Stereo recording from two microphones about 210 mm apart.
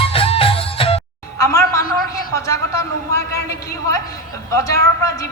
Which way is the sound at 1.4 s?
15° left (ahead or behind).